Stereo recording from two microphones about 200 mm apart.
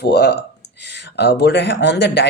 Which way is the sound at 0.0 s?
55° left (ahead or behind).